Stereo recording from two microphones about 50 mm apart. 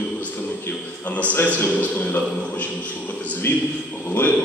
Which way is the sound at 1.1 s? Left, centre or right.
Left.